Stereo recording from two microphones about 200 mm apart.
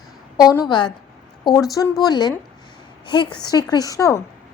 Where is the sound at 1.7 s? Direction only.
20° left (ahead or behind).